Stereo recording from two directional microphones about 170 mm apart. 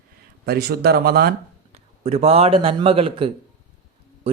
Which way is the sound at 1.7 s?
40° right (ahead or behind).